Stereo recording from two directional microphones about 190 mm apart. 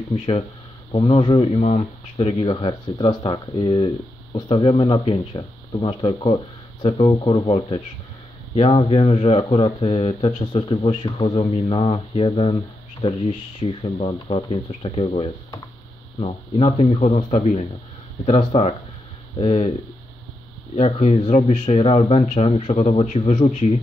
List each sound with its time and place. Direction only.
0.9 s speech: 30° left (ahead or behind)
20.7 s speech: 35° left (ahead or behind)